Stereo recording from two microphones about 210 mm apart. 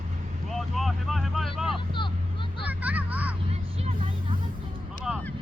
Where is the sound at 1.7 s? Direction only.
25° left (ahead or behind).